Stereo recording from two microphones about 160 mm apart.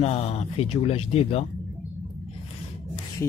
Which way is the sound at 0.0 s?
40° left (ahead or behind).